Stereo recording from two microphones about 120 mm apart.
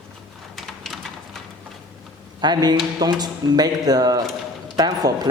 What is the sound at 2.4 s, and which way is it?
Speech, 35° right (ahead or behind).